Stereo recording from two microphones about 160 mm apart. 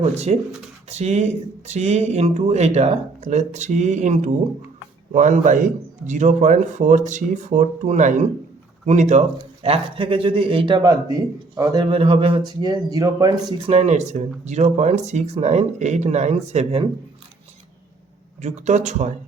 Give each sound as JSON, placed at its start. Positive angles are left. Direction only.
{"t": 0.0, "sound": "a man's voice", "side_deg": -40}
{"t": 13.7, "sound": "speech", "side_deg": -40}
{"t": 18.4, "sound": "speech", "side_deg": -45}